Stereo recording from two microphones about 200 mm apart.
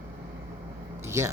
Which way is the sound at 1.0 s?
15° right (ahead or behind).